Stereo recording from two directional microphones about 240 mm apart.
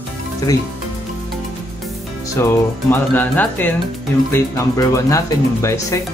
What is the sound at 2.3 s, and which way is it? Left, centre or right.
Speech, centre.